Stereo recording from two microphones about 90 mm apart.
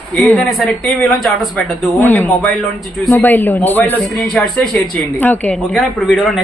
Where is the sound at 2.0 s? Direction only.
20° left (ahead or behind).